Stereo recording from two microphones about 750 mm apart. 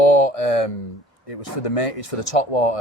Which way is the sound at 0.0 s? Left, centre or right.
Left.